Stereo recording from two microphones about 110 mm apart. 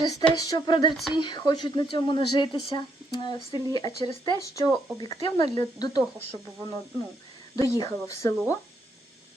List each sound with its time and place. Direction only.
0.0 s speech: 35° left (ahead or behind)
4.4 s a woman's voice: 30° left (ahead or behind)
4.9 s speech: 45° left (ahead or behind)
7.5 s a woman's voice: 35° left (ahead or behind)